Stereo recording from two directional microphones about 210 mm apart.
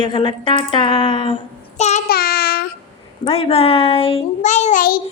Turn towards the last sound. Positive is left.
turn(degrees=40)  # may be behind; listen again after turning